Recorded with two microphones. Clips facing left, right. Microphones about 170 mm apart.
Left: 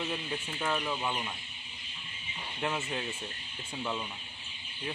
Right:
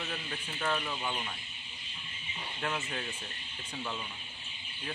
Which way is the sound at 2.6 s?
15° left (ahead or behind).